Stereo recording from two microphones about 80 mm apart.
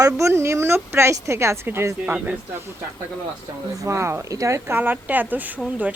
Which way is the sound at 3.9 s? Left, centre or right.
Right.